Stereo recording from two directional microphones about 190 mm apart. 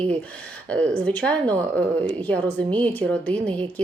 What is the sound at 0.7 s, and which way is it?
Speech, 5° left (ahead or behind).